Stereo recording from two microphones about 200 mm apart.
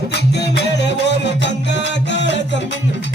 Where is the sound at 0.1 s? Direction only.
55° left (ahead or behind).